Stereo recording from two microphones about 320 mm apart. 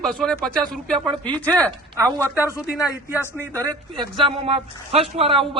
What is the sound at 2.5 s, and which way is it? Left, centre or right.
Speech, centre.